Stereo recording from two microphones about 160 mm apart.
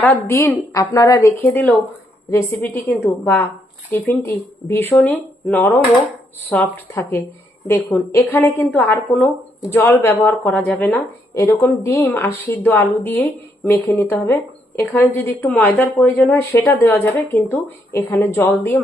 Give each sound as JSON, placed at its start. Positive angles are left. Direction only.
{"t": 0.0, "sound": "a woman's voice", "side_deg": 15}